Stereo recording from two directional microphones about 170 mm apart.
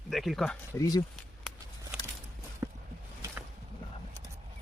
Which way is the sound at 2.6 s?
20° right (ahead or behind).